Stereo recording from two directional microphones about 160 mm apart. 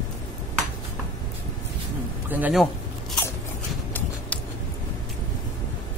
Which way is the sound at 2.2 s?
10° right (ahead or behind).